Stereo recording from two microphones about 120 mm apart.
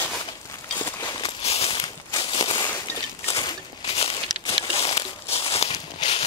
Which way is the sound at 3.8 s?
55° left (ahead or behind).